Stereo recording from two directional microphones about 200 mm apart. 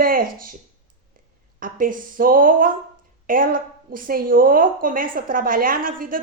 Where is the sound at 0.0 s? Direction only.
45° right (ahead or behind).